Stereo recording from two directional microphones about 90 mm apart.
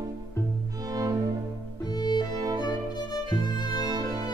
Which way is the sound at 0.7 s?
40° right (ahead or behind).